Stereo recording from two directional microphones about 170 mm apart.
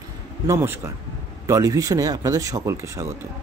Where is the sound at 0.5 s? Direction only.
15° right (ahead or behind).